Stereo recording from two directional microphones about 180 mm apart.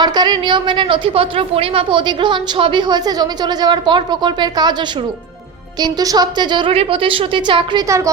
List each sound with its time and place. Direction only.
0.0 s a woman's voice: 25° right (ahead or behind)
5.8 s a woman's voice: 20° right (ahead or behind)